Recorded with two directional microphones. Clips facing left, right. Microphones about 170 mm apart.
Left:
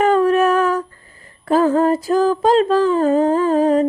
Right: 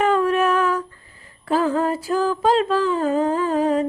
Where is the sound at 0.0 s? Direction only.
40° left (ahead or behind).